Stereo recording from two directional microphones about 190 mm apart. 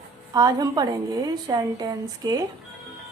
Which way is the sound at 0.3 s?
20° right (ahead or behind).